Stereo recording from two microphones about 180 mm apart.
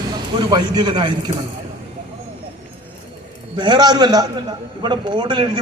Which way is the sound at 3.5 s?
25° right (ahead or behind).